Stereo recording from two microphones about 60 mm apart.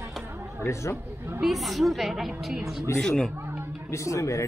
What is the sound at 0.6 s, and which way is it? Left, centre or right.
Speech, left.